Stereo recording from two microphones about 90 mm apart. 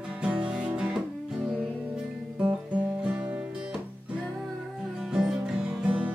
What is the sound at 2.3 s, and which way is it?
Music, 15° right (ahead or behind).